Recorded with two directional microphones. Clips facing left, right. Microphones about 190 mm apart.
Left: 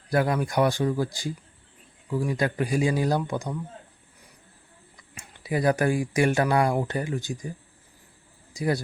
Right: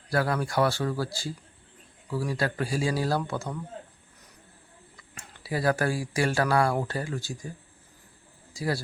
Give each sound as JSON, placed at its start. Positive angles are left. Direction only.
{"t": 0.1, "sound": "speech", "side_deg": 15}
{"t": 4.9, "sound": "speech", "side_deg": 20}
{"t": 8.5, "sound": "a man's voice", "side_deg": 20}